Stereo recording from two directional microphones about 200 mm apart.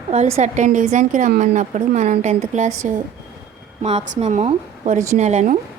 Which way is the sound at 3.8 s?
35° right (ahead or behind).